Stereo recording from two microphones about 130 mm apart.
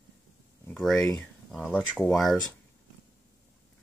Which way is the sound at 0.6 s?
10° left (ahead or behind).